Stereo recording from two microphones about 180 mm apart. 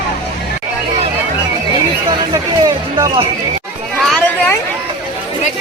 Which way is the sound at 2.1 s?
20° right (ahead or behind).